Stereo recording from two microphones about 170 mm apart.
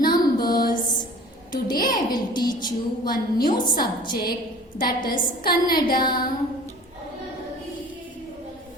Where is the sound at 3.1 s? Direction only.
60° left (ahead or behind).